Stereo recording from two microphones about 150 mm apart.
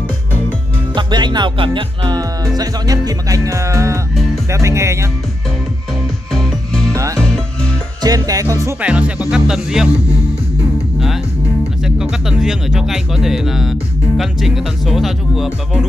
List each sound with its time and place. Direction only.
0.9 s speech: 30° right (ahead or behind)
6.3 s music: 5° left (ahead or behind)
8.0 s speech: 25° right (ahead or behind)
8.8 s speech: 10° right (ahead or behind)
11.8 s speech: 5° right (ahead or behind)